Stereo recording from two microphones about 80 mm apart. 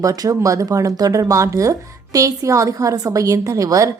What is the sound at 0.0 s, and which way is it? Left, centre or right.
Speech, right.